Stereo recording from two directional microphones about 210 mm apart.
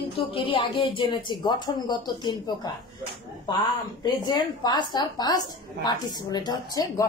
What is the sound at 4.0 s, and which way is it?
A woman's voice, 20° left (ahead or behind).